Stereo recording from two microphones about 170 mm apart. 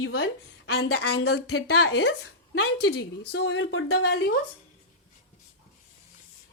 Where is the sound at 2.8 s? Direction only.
80° left.